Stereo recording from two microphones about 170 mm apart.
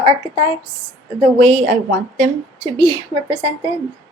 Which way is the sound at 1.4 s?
40° right (ahead or behind).